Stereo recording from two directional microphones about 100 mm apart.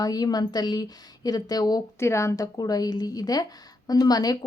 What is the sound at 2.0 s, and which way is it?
A woman's voice, 30° left (ahead or behind).